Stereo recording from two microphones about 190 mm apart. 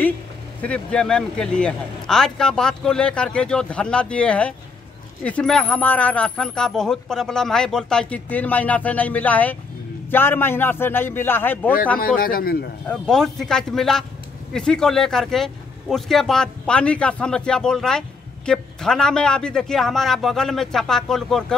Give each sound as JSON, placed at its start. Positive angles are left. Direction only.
{"t": 0.6, "sound": "speech", "side_deg": 5}
{"t": 12.2, "sound": "a man's voice", "side_deg": 50}
{"t": 12.8, "sound": "speech", "side_deg": 5}